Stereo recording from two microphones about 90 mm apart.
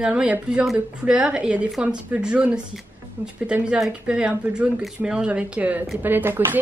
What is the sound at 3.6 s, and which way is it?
Speech, 5° right (ahead or behind).